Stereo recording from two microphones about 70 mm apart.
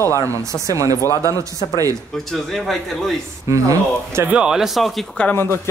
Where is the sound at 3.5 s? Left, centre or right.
Right.